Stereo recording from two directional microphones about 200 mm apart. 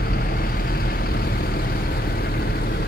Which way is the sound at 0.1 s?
50° left (ahead or behind).